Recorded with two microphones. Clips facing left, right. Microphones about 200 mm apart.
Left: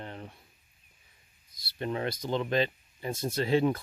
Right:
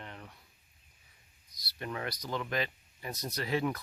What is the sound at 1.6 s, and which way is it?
Speech, 25° left (ahead or behind).